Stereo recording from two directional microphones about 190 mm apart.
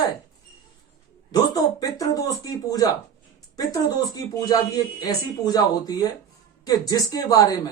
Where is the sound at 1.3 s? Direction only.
20° left (ahead or behind).